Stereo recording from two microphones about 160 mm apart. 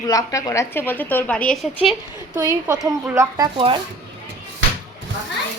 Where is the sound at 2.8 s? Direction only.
15° right (ahead or behind).